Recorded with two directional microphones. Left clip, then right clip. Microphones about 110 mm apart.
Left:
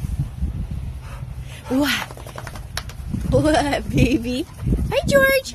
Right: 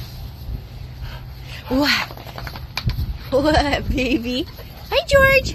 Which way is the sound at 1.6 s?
25° left (ahead or behind).